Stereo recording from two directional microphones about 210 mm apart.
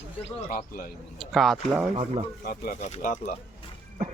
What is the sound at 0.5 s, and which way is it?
Speech, 40° left (ahead or behind).